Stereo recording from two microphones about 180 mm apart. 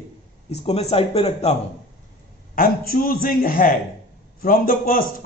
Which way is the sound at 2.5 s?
50° left (ahead or behind).